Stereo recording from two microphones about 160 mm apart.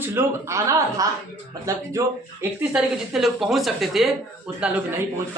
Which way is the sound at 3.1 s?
Centre (ahead or behind).